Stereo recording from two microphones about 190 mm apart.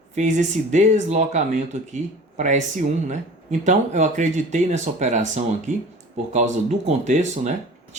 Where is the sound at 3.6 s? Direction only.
40° right (ahead or behind).